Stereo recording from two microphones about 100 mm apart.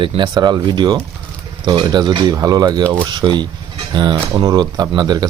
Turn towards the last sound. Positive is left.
turn(degrees=-45)  # may be behind; listen again after turning